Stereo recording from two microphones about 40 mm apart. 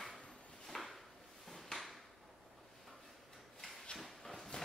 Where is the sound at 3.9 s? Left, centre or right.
Centre.